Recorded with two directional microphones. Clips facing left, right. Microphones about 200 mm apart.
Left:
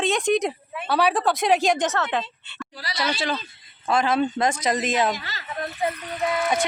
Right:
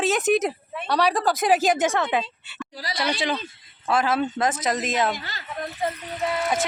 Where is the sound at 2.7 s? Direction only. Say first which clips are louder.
Right 3 dB; 40° right (ahead or behind).